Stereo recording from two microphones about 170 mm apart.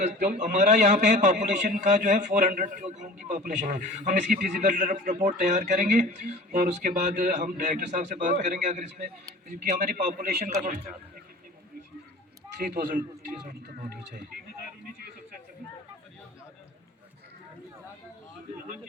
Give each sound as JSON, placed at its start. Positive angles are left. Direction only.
{"t": 0.0, "sound": "a man's voice", "side_deg": -45}